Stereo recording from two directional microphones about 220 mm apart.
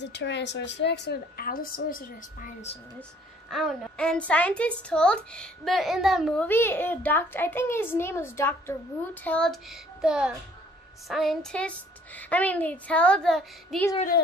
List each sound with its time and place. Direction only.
0.0 s a woman's voice: 55° left (ahead or behind); by 2.8 s 35° left (ahead or behind)
3.4 s a woman's voice: centre (ahead or behind)
13.9 s a woman's voice: 40° left (ahead or behind)